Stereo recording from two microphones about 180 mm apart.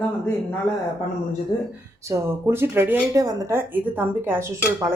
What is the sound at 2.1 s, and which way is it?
Speech, 15° right (ahead or behind).